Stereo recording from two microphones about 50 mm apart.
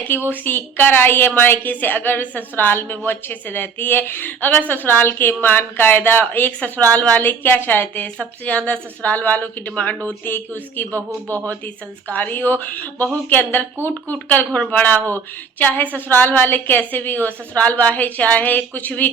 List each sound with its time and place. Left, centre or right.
0.3 s a woman's voice: left
6.6 s a woman's voice: left
7.2 s a woman's voice: left
8.0 s a woman's voice: left
10.2 s a woman's voice: left
12.1 s a woman's voice: left